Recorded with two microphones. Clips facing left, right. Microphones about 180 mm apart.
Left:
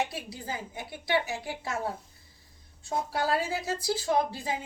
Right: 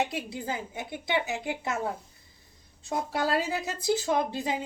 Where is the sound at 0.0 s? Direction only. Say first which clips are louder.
Right 3 dB; 20° right (ahead or behind).